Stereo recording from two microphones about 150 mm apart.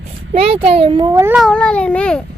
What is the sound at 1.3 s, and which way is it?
Speech, centre (ahead or behind).